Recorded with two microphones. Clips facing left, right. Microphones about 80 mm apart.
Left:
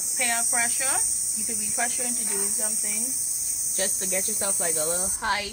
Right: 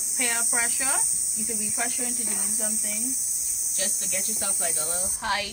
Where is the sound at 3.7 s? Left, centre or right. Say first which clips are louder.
Left 5 dB; left.